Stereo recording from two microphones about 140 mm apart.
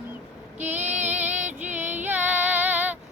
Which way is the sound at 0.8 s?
55° right (ahead or behind).